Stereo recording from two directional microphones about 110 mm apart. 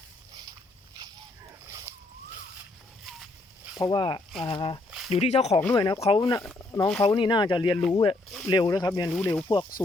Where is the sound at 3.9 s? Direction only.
45° left (ahead or behind).